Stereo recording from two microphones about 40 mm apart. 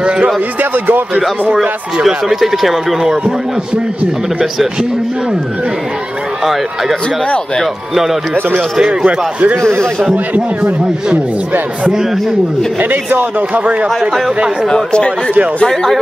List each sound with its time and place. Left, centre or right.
0.0 s speech: right
0.6 s speech: right
1.5 s speech: right
2.0 s a man's voice: centre
6.4 s a man's voice: centre
9.0 s a man's voice: right
11.9 s a man's voice: centre
12.8 s speech: right
13.8 s speech: centre
14.7 s speech: left
15.6 s speech: centre